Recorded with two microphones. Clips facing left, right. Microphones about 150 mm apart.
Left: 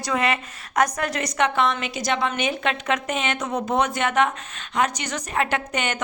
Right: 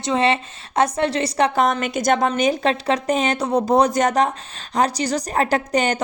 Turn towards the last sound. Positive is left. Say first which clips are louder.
# right 6 dB
turn(degrees=-35)  # may be behind; listen again after turning